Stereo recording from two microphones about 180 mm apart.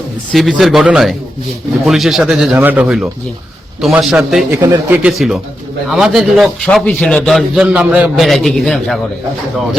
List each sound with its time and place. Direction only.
0.3 s a man's voice: centre (ahead or behind)
4.6 s speech: 20° right (ahead or behind)
5.0 s a man's voice: 5° right (ahead or behind)